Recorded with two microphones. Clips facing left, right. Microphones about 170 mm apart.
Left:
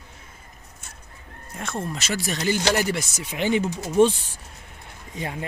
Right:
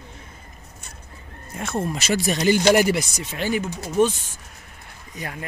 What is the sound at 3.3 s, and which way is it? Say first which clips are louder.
Speech: left 2 dB; 20° left (ahead or behind).